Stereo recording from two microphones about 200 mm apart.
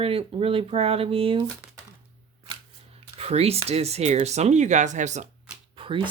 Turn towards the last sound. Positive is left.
turn(degrees=-25)  # may be behind; listen again after turning